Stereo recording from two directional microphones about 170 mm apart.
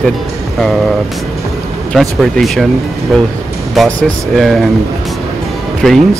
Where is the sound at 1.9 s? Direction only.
Centre (ahead or behind).